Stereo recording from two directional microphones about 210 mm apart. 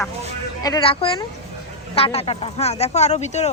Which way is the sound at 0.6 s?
20° left (ahead or behind).